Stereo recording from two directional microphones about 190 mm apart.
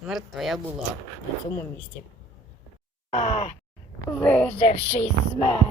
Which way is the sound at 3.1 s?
35° left (ahead or behind).